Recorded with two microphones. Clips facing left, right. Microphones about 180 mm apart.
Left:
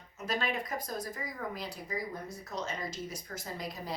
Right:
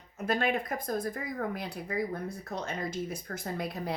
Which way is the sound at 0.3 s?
55° right (ahead or behind).